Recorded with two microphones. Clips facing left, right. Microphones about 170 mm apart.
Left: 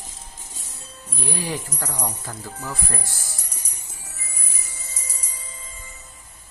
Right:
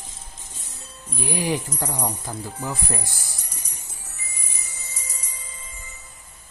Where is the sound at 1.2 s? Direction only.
15° right (ahead or behind).